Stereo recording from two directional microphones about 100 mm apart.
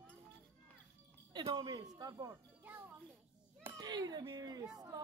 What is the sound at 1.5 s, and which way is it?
Speech, 45° right (ahead or behind).